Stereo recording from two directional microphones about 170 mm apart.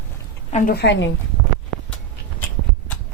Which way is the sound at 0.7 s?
90° left.